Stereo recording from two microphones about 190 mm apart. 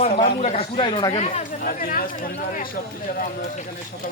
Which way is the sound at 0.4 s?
30° left (ahead or behind).